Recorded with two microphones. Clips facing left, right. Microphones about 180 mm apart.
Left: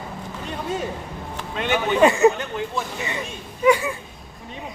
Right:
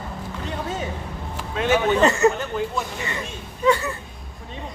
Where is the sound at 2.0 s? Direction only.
15° left (ahead or behind).